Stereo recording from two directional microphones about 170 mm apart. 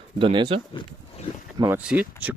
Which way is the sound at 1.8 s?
10° right (ahead or behind).